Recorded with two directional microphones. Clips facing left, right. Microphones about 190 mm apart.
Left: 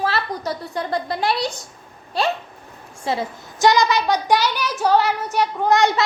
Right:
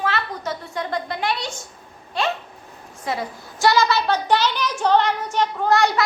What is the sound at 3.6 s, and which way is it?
Child singing, 20° left (ahead or behind).